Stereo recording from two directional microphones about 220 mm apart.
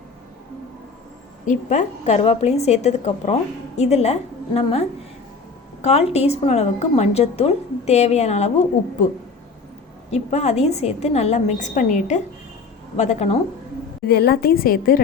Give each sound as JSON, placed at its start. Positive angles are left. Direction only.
{"t": 1.5, "sound": "a woman's voice", "side_deg": 30}
{"t": 10.1, "sound": "a woman's voice", "side_deg": 30}
{"t": 14.1, "sound": "a woman's voice", "side_deg": 45}